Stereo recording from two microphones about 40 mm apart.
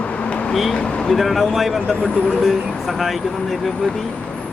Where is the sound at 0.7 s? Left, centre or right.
Left.